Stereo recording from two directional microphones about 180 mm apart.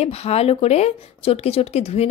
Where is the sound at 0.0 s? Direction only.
35° left (ahead or behind).